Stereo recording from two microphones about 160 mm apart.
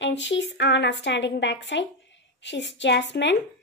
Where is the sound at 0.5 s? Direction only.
90° left.